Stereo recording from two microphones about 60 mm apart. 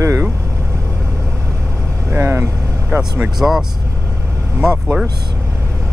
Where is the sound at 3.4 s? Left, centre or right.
Right.